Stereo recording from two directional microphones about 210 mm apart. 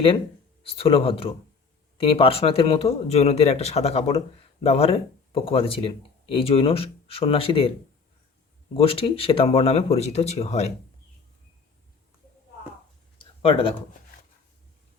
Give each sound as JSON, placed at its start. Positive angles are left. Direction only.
{"t": 0.6, "sound": "speech", "side_deg": 25}
{"t": 8.7, "sound": "speech", "side_deg": 25}
{"t": 13.1, "sound": "a sound", "side_deg": 25}